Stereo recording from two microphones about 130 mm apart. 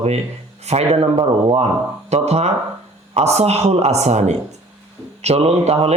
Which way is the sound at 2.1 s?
55° right (ahead or behind).